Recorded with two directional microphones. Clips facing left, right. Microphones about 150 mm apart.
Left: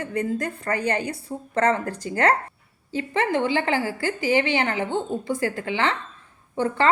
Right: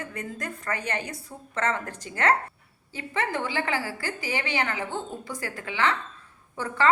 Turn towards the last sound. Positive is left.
turn(degrees=30)  # may be behind; listen again after turning